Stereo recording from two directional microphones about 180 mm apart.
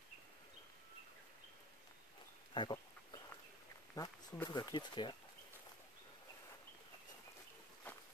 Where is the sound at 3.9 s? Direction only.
20° left (ahead or behind).